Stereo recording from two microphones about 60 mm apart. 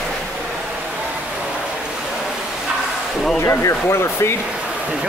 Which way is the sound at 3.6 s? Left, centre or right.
Left.